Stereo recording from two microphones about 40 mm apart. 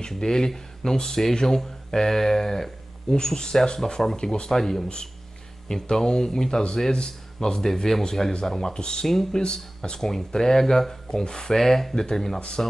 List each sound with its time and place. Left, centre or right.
0.1 s speech: centre
4.8 s speech: left
11.5 s speech: centre